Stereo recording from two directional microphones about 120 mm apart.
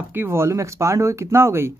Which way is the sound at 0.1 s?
20° right (ahead or behind).